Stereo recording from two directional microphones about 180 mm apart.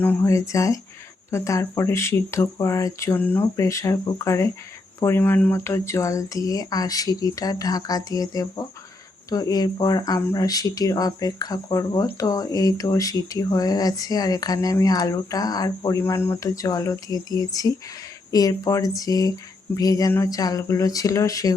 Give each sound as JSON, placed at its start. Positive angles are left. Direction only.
{"t": 0.0, "sound": "speech", "side_deg": 15}